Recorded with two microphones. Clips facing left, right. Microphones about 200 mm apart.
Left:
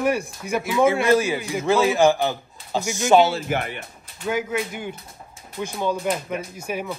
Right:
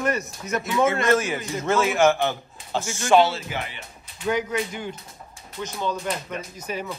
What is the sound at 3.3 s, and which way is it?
Speech, 55° left (ahead or behind).